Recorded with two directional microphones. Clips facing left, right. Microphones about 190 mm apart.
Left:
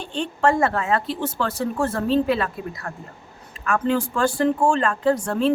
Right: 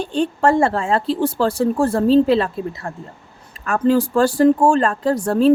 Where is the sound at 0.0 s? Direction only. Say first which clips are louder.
Right 4 dB; 35° right (ahead or behind).